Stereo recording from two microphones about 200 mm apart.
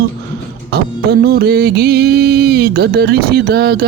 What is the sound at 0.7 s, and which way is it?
Music, 55° right (ahead or behind).